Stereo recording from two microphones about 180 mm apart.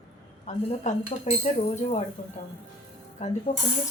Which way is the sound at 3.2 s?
40° left (ahead or behind).